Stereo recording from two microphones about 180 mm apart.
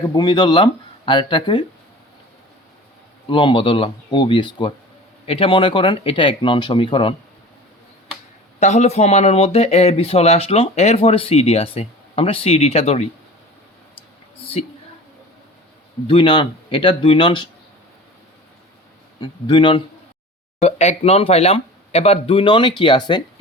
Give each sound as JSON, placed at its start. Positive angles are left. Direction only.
{"t": 0.1, "sound": "speech", "side_deg": 25}
{"t": 3.2, "sound": "speech", "side_deg": 30}
{"t": 8.5, "sound": "speech", "side_deg": 40}
{"t": 14.6, "sound": "speech", "side_deg": 35}
{"t": 16.0, "sound": "speech", "side_deg": 25}
{"t": 19.2, "sound": "speech", "side_deg": 25}
{"t": 20.6, "sound": "speech", "side_deg": 35}